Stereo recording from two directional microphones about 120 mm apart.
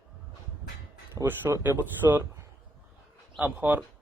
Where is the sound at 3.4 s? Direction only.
15° right (ahead or behind).